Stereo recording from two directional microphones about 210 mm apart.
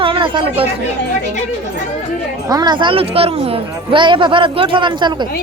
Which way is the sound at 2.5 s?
20° right (ahead or behind).